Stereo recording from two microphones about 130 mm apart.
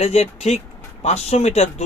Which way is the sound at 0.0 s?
55° left (ahead or behind).